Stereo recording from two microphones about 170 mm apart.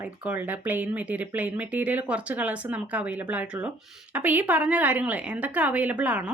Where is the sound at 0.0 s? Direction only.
10° right (ahead or behind).